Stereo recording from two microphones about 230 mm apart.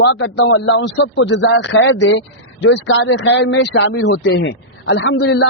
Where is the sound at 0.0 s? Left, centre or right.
Left.